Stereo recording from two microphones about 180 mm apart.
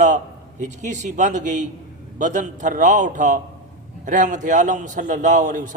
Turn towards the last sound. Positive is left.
turn(degrees=-45)  # may be behind; listen again after turning